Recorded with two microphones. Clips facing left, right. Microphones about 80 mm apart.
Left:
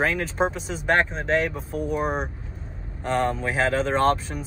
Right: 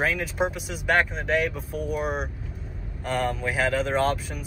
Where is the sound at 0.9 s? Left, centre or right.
Left.